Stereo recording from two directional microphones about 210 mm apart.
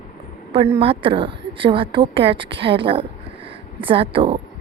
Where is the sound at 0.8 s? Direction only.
25° right (ahead or behind).